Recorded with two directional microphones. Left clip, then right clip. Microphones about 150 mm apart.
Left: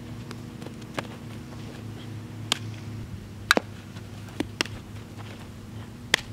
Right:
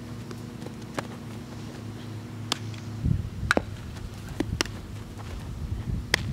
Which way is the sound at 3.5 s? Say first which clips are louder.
Left 3 dB; 25° left (ahead or behind).